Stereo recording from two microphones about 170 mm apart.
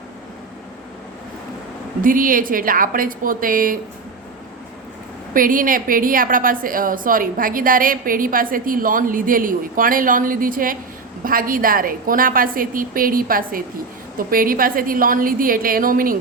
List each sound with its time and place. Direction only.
2.0 s a woman's voice: 55° right (ahead or behind)
5.3 s a woman's voice: 55° right (ahead or behind)